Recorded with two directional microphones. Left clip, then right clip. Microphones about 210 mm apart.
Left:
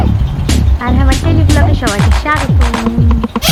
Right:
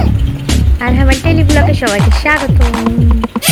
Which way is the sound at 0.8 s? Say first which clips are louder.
Right 3 dB; 20° right (ahead or behind).